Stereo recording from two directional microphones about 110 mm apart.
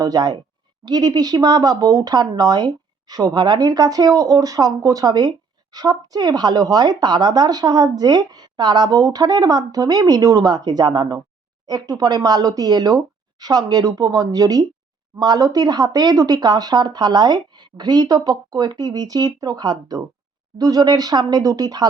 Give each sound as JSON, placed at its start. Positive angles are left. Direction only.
{"t": 0.0, "sound": "a woman's voice", "side_deg": -35}